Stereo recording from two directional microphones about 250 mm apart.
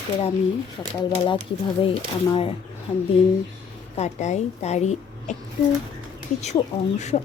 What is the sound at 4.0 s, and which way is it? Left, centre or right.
A woman's voice, left.